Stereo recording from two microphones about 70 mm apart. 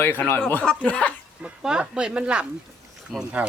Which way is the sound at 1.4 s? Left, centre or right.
Centre.